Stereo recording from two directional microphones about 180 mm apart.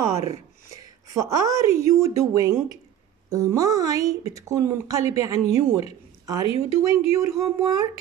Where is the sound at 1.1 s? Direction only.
20° right (ahead or behind).